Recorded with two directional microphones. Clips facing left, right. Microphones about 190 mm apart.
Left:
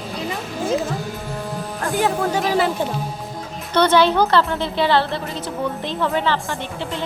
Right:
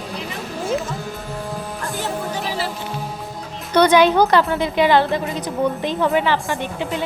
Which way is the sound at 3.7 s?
15° right (ahead or behind).